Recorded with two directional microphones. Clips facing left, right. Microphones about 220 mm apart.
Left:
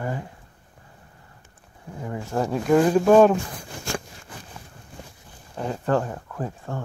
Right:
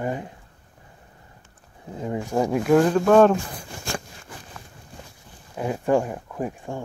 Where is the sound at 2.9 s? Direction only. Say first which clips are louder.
Left 2 dB; 10° left (ahead or behind).